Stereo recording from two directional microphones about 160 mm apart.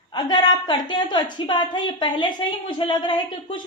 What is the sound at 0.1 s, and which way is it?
A woman's voice, 25° left (ahead or behind).